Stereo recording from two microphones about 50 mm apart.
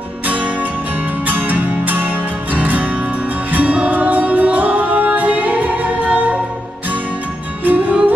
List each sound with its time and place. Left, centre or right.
1.2 s music: right
3.9 s music: right
7.6 s music: right